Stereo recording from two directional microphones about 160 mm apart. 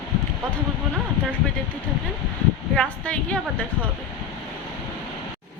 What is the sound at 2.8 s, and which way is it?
Speech, 10° left (ahead or behind).